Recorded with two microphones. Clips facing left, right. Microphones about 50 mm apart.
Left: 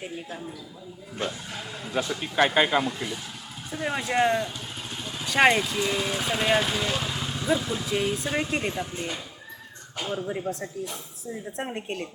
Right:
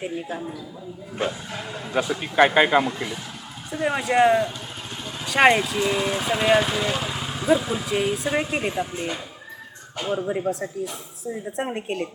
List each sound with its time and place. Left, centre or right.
0.0 s speech: centre
10.5 s speech: centre